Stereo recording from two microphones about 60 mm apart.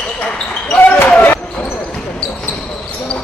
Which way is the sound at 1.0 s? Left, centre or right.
Left.